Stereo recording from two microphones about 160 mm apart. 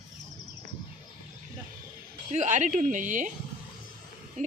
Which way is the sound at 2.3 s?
50° right (ahead or behind).